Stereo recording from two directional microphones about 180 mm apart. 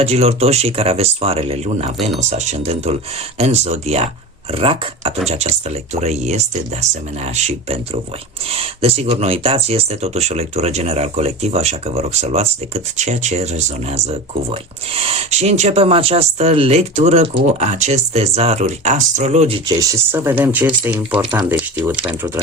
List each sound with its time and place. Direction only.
0.0 s speech: 35° right (ahead or behind)
19.6 s speech: 20° right (ahead or behind)